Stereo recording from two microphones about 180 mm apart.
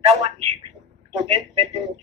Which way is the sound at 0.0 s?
35° right (ahead or behind).